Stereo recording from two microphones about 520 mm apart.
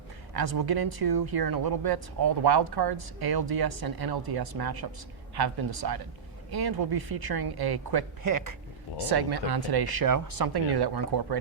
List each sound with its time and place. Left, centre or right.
0.3 s speech: right